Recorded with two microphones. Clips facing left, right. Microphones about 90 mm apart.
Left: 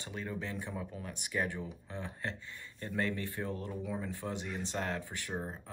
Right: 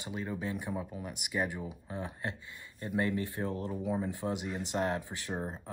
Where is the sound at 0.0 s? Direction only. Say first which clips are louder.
Right 3 dB; 15° right (ahead or behind).